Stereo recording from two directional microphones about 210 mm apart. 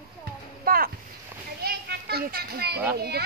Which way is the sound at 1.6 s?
50° right (ahead or behind).